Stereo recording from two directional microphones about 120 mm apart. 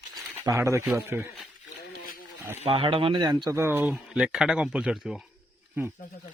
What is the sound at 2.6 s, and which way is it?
Speech, 50° right (ahead or behind).